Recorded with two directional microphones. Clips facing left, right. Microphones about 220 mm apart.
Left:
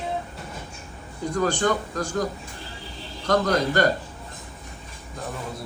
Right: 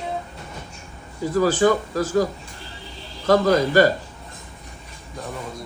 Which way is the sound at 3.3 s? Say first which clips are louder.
Right 5 dB; 5° right (ahead or behind).